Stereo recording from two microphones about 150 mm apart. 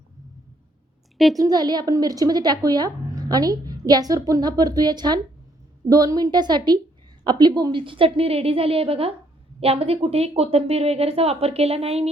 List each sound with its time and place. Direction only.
1.4 s a woman's voice: 25° right (ahead or behind); by 12.1 s 40° right (ahead or behind)